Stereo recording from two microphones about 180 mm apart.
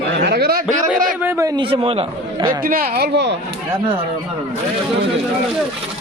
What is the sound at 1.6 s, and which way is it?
Speech, 30° right (ahead or behind).